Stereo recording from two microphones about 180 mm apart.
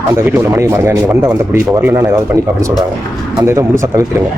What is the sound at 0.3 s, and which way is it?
Speech, 15° right (ahead or behind).